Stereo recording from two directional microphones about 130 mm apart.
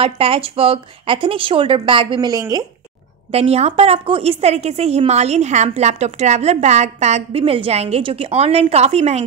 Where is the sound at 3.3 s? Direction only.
55° right (ahead or behind).